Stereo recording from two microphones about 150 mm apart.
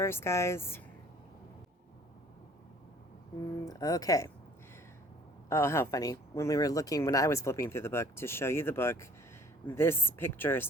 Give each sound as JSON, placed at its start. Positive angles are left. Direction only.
{"t": 0.0, "sound": "speech", "side_deg": 15}
{"t": 3.7, "sound": "speech", "side_deg": 25}
{"t": 5.5, "sound": "speech", "side_deg": 15}